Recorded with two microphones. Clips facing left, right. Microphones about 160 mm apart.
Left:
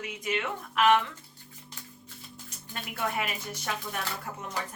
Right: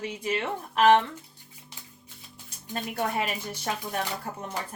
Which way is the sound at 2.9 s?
35° right (ahead or behind).